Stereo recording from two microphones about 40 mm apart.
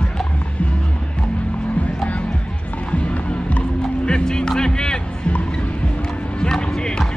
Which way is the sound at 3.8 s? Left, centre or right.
Centre.